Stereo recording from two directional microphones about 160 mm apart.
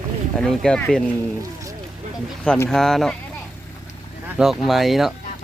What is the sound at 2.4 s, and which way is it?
Speech, 15° left (ahead or behind).